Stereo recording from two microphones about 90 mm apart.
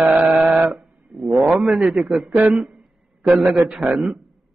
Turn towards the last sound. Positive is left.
turn(degrees=-5)  # may be behind; listen again after turning